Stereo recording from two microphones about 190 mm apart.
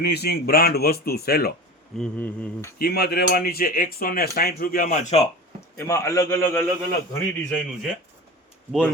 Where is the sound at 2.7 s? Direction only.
55° left (ahead or behind); by 5.3 s 35° left (ahead or behind).